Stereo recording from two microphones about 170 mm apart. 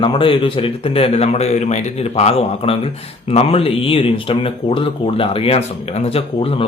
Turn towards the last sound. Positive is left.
turn(degrees=35)  # may be behind; listen again after turning